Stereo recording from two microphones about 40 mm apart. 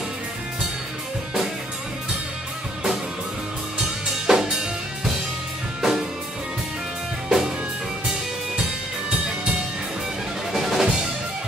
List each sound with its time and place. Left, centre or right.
3.7 s drum kit: centre
5.8 s music: centre
7.2 s music: centre
9.1 s music: right
10.5 s drum: centre